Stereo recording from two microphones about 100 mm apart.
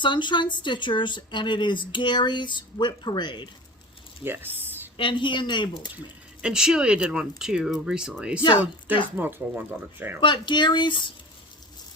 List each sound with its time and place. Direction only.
0.0 s speech: 50° left (ahead or behind)
4.2 s a sound: 20° right (ahead or behind)
4.9 s speech: 55° left (ahead or behind)
6.4 s speech: 5° right (ahead or behind)
9.1 s speech: 20° right (ahead or behind)
10.2 s speech: 50° left (ahead or behind)